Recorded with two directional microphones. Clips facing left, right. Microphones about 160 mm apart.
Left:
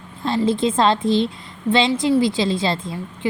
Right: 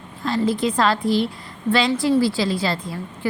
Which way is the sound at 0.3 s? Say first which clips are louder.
Left 2 dB; 25° left (ahead or behind).